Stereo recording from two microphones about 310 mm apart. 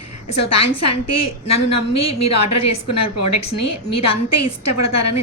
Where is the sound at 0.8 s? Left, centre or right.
Left.